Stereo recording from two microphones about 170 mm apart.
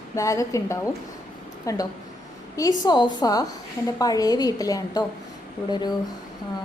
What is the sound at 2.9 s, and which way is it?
A woman's voice, 25° left (ahead or behind).